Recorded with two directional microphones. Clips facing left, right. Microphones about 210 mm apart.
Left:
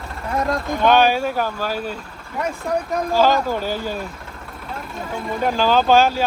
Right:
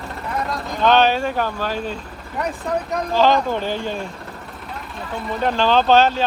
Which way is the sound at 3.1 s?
5° left (ahead or behind).